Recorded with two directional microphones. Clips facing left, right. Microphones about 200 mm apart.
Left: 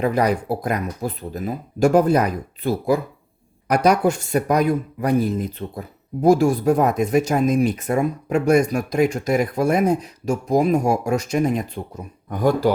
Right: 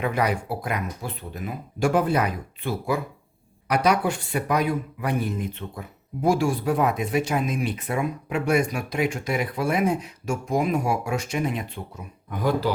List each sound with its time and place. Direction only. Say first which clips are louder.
0.0 s speech: left 5 dB; 35° left (ahead or behind)